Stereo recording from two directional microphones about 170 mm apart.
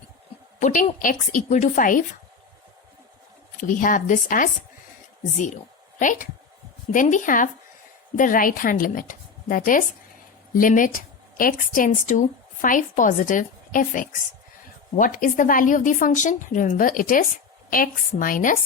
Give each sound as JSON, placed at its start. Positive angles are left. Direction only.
{"t": 0.6, "sound": "a woman's voice", "side_deg": 50}
{"t": 3.6, "sound": "speech", "side_deg": 55}
{"t": 6.0, "sound": "a woman's voice", "side_deg": 50}